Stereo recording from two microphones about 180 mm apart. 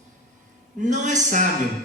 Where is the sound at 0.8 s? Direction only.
45° right (ahead or behind).